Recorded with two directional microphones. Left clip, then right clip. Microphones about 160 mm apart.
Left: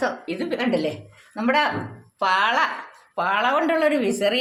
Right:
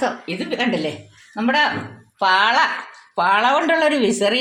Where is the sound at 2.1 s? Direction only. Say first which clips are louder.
Right 4 dB; 40° right (ahead or behind).